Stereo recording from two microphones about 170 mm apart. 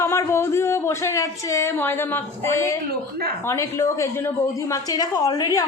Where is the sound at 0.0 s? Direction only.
15° left (ahead or behind).